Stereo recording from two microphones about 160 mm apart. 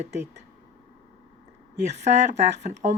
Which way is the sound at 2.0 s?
45° right (ahead or behind).